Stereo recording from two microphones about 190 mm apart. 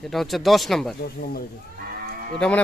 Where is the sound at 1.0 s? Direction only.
55° left (ahead or behind).